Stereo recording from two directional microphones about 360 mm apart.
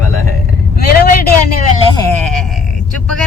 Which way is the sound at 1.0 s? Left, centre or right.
Left.